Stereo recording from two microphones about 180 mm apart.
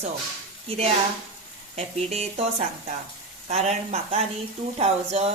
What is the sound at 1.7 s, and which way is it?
Speech, 35° right (ahead or behind).